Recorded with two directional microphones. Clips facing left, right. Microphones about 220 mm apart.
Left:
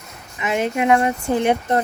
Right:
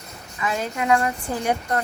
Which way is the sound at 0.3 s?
20° left (ahead or behind).